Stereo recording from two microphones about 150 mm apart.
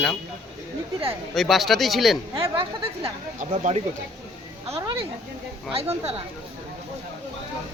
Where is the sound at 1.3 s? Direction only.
Centre (ahead or behind).